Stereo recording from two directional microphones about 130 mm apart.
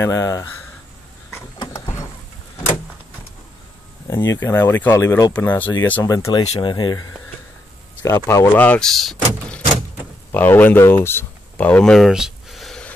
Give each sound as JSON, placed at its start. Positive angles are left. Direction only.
{"t": 0.0, "sound": "speech", "side_deg": 25}
{"t": 4.1, "sound": "speech", "side_deg": 20}
{"t": 5.3, "sound": "speech", "side_deg": 15}
{"t": 6.0, "sound": "speech", "side_deg": 30}
{"t": 8.3, "sound": "speech", "side_deg": 20}
{"t": 8.6, "sound": "speech", "side_deg": 5}
{"t": 10.3, "sound": "speech", "side_deg": 15}